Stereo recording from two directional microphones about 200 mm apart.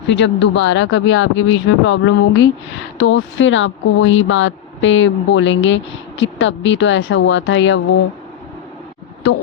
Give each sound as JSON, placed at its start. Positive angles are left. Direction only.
{"t": 0.1, "sound": "speech", "side_deg": 65}